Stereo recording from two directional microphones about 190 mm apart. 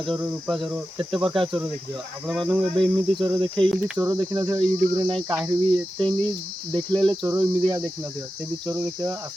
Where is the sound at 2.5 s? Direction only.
25° right (ahead or behind).